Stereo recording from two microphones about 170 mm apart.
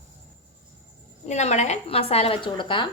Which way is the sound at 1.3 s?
40° left (ahead or behind).